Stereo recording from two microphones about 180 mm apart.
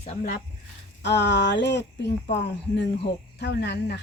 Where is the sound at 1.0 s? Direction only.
75° left (ahead or behind).